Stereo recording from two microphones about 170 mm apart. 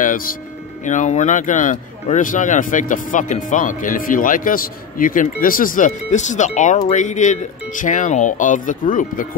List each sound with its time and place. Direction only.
0.0 s speech: 55° left (ahead or behind)